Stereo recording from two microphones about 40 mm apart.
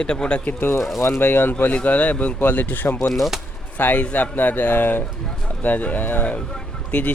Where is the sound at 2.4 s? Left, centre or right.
Left.